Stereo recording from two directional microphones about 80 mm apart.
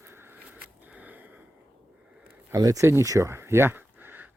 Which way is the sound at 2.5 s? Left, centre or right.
Right.